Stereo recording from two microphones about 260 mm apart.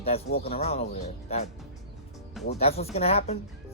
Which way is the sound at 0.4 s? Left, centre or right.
Left.